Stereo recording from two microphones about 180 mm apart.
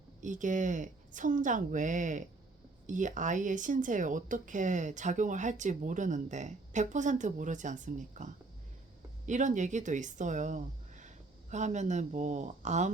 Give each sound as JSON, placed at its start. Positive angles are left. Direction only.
{"t": 0.2, "sound": "speech", "side_deg": -45}